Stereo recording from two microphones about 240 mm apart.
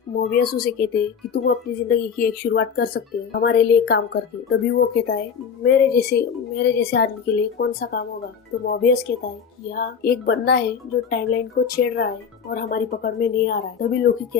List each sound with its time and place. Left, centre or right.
0.2 s speech: left